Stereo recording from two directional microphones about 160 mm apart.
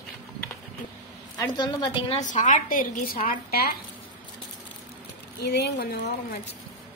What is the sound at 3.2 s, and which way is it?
Speech, 75° left (ahead or behind).